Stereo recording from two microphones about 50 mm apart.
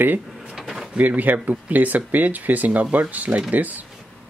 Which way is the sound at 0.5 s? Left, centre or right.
Centre.